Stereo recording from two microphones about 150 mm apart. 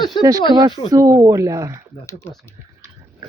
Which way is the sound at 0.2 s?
25° right (ahead or behind).